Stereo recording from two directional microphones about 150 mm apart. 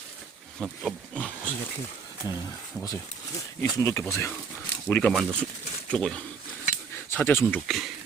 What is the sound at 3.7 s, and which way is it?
Speech, 20° left (ahead or behind).